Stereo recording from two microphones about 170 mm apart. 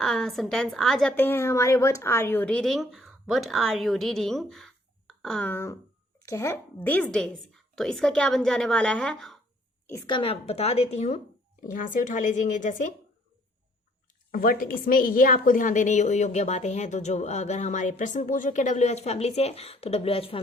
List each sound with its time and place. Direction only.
0.0 s a woman's voice: centre (ahead or behind)
10.1 s a woman's voice: 30° left (ahead or behind)
11.6 s a woman's voice: 50° left (ahead or behind)
14.3 s a woman's voice: 55° left (ahead or behind); by 20.4 s 35° left (ahead or behind)